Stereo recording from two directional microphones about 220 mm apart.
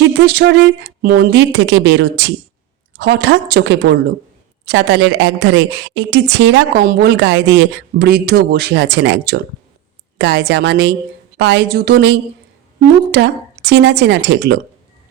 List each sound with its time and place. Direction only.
0.0 s speech: 50° right (ahead or behind)